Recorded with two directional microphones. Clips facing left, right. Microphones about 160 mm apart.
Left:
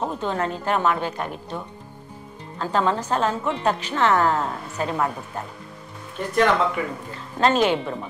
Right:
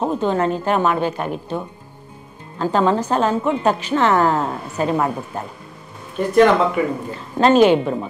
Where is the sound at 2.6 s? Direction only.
20° right (ahead or behind).